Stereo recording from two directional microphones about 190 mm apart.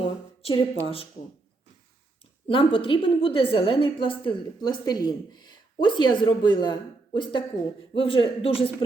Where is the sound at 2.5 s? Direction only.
25° left (ahead or behind).